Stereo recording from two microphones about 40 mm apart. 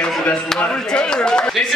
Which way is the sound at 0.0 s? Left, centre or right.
Left.